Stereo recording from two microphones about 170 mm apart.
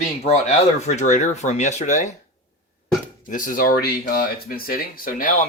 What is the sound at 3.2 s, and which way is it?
Speech, 50° left (ahead or behind).